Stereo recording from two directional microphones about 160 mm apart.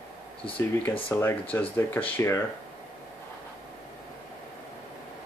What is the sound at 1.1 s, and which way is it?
Speech, 10° left (ahead or behind).